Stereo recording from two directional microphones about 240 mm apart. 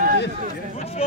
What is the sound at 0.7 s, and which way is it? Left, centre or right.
Speech, left.